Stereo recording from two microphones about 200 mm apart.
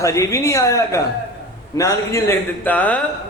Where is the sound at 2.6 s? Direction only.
10° left (ahead or behind).